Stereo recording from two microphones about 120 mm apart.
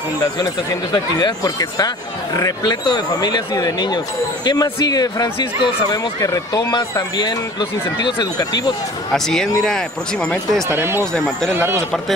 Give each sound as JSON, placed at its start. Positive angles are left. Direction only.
{"t": 0.9, "sound": "speech", "side_deg": 35}
{"t": 5.9, "sound": "speech", "side_deg": 30}
{"t": 9.1, "sound": "speech", "side_deg": 5}
{"t": 10.7, "sound": "speech", "side_deg": -20}